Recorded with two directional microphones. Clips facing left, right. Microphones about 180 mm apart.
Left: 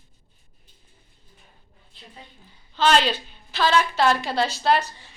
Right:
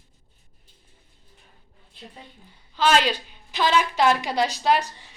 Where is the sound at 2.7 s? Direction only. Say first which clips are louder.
Even; 10° right (ahead or behind).